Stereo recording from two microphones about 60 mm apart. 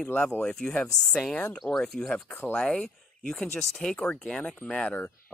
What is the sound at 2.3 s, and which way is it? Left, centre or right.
Speech, left.